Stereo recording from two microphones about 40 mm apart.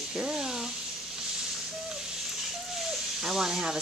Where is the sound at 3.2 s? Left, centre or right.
Centre.